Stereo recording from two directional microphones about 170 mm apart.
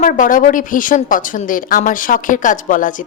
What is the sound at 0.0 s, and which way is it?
A woman's voice, 50° left (ahead or behind).